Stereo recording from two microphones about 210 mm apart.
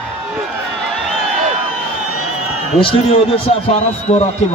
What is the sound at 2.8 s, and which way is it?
A man's voice, 25° left (ahead or behind).